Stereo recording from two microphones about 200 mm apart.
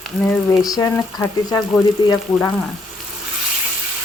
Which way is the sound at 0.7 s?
15° left (ahead or behind).